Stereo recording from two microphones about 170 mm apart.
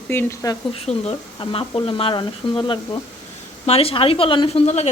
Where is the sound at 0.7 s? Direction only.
35° left (ahead or behind).